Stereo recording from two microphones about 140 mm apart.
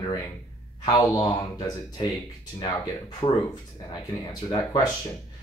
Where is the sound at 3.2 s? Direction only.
30° left (ahead or behind).